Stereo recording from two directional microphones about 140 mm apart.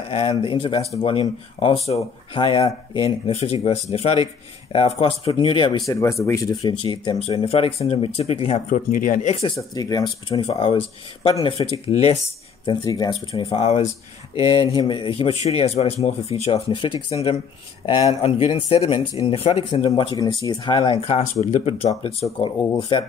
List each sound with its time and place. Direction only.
0.1 s a man's voice: 35° left (ahead or behind)
6.7 s a man's voice: 35° left (ahead or behind)
8.6 s speech: 70° left (ahead or behind); by 9.5 s 55° left (ahead or behind)
9.6 s a man's voice: 25° left (ahead or behind); by 12.2 s 45° left (ahead or behind)
12.6 s speech: 30° left (ahead or behind)
13.3 s a man's voice: 45° left (ahead or behind)
14.3 s a man's voice: 35° left (ahead or behind)
22.8 s speech: 35° left (ahead or behind)